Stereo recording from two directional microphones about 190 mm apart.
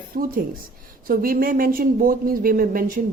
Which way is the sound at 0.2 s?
45° right (ahead or behind).